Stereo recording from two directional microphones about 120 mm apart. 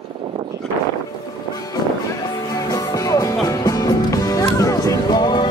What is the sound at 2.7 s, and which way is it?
Music, 30° left (ahead or behind).